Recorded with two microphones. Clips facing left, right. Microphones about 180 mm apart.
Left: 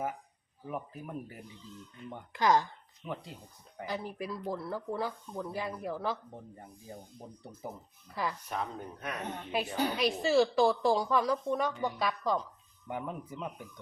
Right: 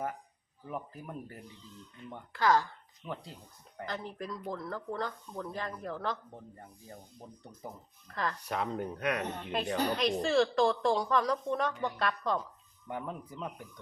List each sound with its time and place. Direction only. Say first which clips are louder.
0.7 s speech: left 1 dB; 5° left (ahead or behind)
2.3 s speech: left 1 dB; 20° left (ahead or behind)
3.0 s speech: left 1 dB; 5° left (ahead or behind)
7.6 s speech: left 3 dB; 10° left (ahead or behind)
8.4 s speech: right 3 dB; 75° right (ahead or behind)
9.5 s speech: even; 5° left (ahead or behind)